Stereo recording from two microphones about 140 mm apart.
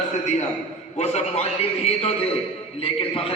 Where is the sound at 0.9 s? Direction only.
50° left (ahead or behind).